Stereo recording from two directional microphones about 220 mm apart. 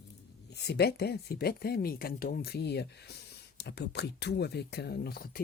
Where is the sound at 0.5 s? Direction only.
50° left (ahead or behind).